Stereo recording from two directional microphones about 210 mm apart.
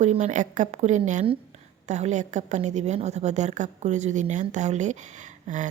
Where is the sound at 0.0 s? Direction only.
35° right (ahead or behind).